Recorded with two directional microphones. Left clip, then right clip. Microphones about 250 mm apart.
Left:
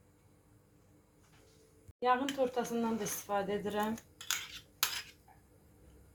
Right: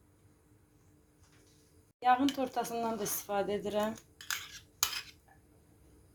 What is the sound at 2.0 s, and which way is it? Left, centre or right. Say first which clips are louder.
Speech: right 2 dB; right.